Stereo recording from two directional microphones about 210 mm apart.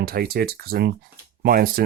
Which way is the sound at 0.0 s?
45° right (ahead or behind).